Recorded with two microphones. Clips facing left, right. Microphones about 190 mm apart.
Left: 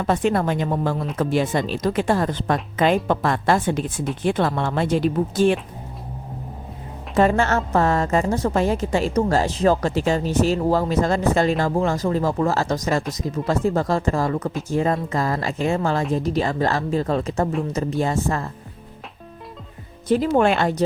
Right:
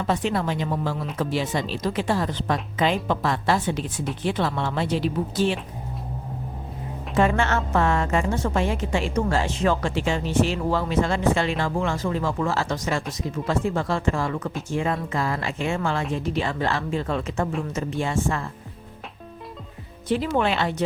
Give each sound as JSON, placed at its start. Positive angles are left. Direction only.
{"t": 0.0, "sound": "speech", "side_deg": 50}
{"t": 7.2, "sound": "a woman's voice", "side_deg": 40}
{"t": 20.1, "sound": "speech", "side_deg": 40}